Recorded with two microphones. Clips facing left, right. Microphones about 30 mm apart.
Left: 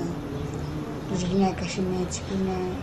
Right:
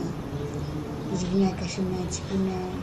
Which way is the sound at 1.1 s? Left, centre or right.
Left.